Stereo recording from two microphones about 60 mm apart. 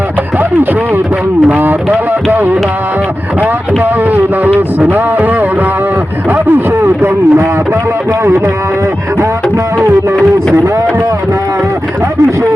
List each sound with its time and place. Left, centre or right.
1.5 s speech: right
4.8 s speech: right
6.3 s a sound: right